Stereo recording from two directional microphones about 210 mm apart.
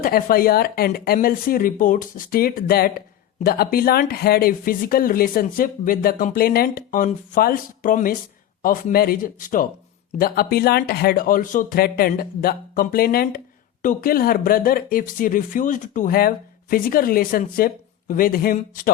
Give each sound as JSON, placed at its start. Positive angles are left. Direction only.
{"t": 0.0, "sound": "speech", "side_deg": 45}